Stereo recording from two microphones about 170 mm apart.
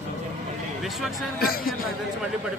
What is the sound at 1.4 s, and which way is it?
Speech, 60° left (ahead or behind).